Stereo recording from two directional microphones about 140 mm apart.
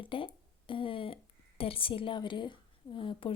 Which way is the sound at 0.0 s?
40° left (ahead or behind).